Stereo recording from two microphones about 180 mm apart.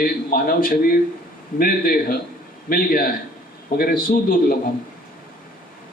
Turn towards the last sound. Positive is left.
turn(degrees=55)  # may be behind; listen again after turning